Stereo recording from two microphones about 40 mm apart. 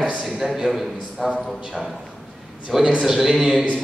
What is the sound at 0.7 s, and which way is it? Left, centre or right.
Speech, centre.